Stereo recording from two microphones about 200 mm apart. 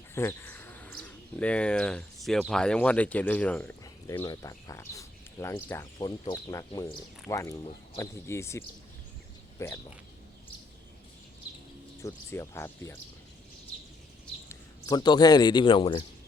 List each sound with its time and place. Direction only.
0.1 s speech: 10° left (ahead or behind)
12.0 s speech: 15° left (ahead or behind)
14.5 s a man's voice: 20° left (ahead or behind)